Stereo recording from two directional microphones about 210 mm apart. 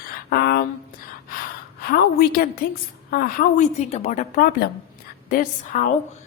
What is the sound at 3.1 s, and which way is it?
Speech, 45° left (ahead or behind).